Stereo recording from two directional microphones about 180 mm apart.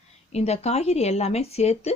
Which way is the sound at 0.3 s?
35° left (ahead or behind).